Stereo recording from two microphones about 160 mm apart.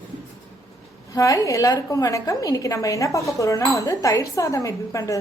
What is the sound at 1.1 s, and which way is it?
Speech, 20° left (ahead or behind).